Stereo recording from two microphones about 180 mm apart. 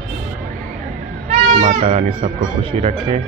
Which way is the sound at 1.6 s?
40° right (ahead or behind).